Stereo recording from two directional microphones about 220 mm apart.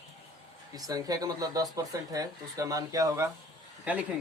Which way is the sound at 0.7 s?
15° right (ahead or behind).